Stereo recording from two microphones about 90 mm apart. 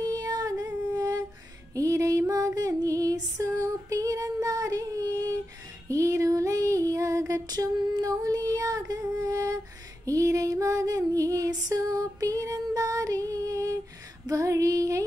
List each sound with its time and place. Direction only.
0.0 s female singing: 45° right (ahead or behind)